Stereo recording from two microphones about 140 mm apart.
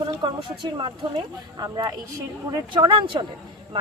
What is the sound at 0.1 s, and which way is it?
A woman's voice, 35° right (ahead or behind).